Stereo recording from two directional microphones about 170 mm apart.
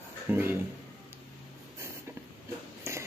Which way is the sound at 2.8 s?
15° right (ahead or behind).